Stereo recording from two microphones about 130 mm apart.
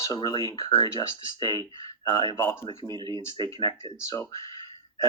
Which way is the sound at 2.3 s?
20° left (ahead or behind).